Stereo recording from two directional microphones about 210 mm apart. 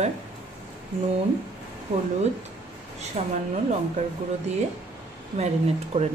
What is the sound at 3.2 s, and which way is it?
Speech, 30° right (ahead or behind).